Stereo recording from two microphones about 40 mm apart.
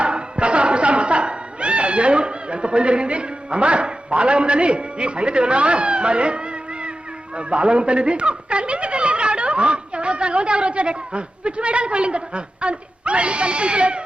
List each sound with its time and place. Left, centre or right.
0.0 s music: right
7.3 s speech: right